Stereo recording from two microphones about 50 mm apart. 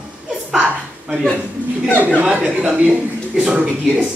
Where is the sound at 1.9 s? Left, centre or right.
Right.